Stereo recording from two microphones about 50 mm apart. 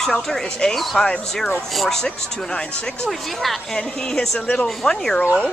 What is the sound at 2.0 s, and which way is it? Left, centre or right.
Speech, centre.